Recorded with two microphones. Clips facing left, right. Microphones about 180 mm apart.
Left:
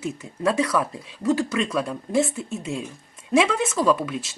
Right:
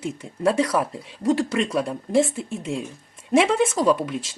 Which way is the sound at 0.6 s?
30° right (ahead or behind).